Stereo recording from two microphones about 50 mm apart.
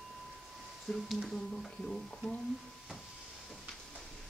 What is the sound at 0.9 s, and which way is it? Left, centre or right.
Speech, centre.